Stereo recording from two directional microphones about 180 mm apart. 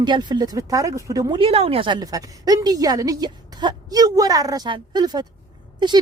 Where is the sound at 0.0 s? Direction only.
25° right (ahead or behind).